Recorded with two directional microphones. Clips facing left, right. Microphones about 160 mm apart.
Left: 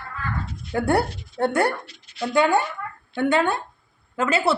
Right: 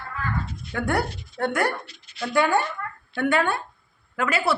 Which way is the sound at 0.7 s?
30° left (ahead or behind).